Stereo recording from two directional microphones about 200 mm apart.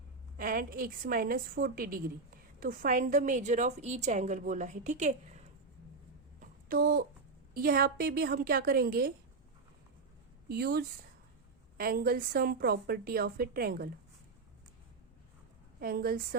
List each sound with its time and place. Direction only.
0.3 s a woman's voice: 45° right (ahead or behind)
6.4 s a sound: 45° right (ahead or behind)
7.5 s a woman's voice: 45° right (ahead or behind)
10.5 s a woman's voice: 50° right (ahead or behind)
15.8 s a woman's voice: 45° right (ahead or behind)